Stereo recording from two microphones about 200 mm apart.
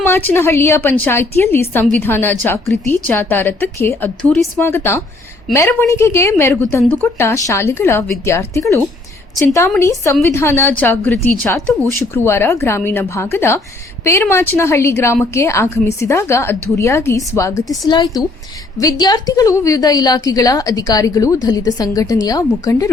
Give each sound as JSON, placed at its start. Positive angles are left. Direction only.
{"t": 0.0, "sound": "a woman's voice", "side_deg": 10}